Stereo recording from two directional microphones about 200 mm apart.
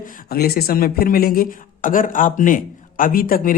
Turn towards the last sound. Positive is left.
turn(degrees=45)  # may be behind; listen again after turning